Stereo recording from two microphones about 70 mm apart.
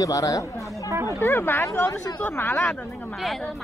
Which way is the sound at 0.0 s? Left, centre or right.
Left.